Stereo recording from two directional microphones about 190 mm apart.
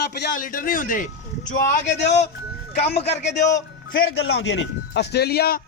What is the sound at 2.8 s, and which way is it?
Speech, 30° left (ahead or behind).